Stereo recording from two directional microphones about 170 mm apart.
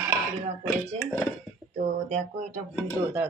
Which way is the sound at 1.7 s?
45° right (ahead or behind).